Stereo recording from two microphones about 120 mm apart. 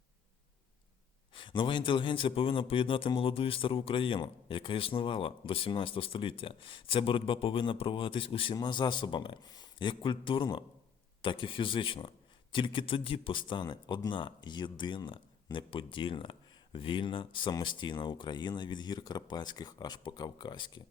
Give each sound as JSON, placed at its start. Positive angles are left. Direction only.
{"t": 1.3, "sound": "a man's voice", "side_deg": 45}